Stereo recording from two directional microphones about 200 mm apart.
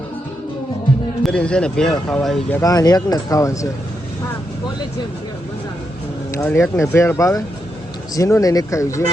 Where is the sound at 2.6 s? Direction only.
20° left (ahead or behind).